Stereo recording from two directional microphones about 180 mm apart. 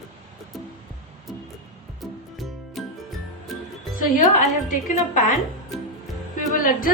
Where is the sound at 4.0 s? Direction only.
50° left (ahead or behind).